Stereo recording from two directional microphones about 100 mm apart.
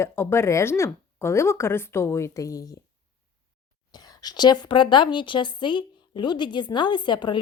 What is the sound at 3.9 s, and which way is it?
A woman's voice, 40° left (ahead or behind).